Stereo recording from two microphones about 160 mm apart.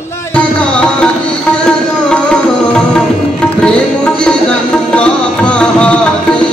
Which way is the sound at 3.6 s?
5° left (ahead or behind).